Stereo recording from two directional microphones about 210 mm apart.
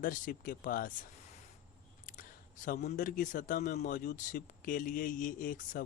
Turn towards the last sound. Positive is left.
turn(degrees=40)  # may be behind; listen again after turning